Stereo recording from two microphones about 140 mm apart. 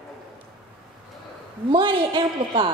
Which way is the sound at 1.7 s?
35° right (ahead or behind).